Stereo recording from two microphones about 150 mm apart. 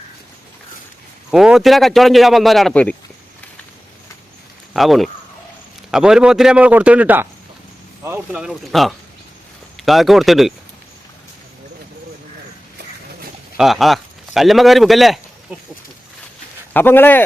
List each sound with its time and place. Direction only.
1.3 s a man's voice: 5° right (ahead or behind)
4.7 s a man's voice: centre (ahead or behind)
8.4 s a man's voice: centre (ahead or behind)
13.6 s a man's voice: centre (ahead or behind)
16.7 s speech: 15° left (ahead or behind)